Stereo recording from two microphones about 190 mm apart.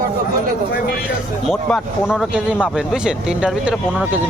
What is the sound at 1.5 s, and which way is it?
Speech, centre (ahead or behind).